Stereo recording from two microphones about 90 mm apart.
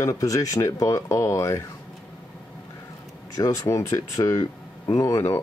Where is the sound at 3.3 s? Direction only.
40° left (ahead or behind).